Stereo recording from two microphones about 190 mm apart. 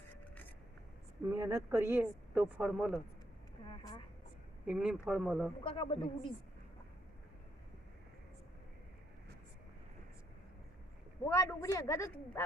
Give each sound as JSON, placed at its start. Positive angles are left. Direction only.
{"t": 0.1, "sound": "vehicle", "side_deg": 10}
{"t": 1.3, "sound": "speech", "side_deg": -15}
{"t": 3.7, "sound": "vehicle", "side_deg": 25}
{"t": 4.6, "sound": "speech", "side_deg": -5}
{"t": 5.6, "sound": "a man's voice", "side_deg": 30}
{"t": 11.3, "sound": "a woman's voice", "side_deg": 15}